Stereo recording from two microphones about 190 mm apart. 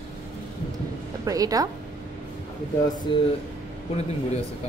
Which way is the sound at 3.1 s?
25° left (ahead or behind).